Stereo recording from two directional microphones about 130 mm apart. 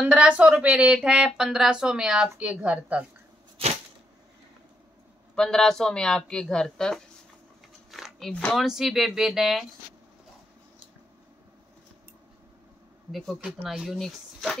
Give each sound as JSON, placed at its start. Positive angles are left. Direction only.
{"t": 0.0, "sound": "a woman's voice", "side_deg": -10}
{"t": 3.6, "sound": "a sound", "side_deg": -45}
{"t": 5.3, "sound": "speech", "side_deg": 5}
{"t": 7.9, "sound": "a sound", "side_deg": 0}
{"t": 8.6, "sound": "speech", "side_deg": -5}
{"t": 13.1, "sound": "speech", "side_deg": 0}